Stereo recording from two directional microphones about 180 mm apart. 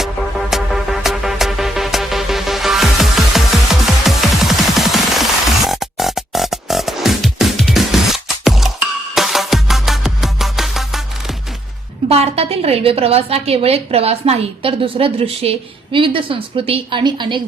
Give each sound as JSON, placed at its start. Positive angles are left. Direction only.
{"t": 0.0, "sound": "music", "side_deg": 0}
{"t": 12.0, "sound": "a woman's voice", "side_deg": -35}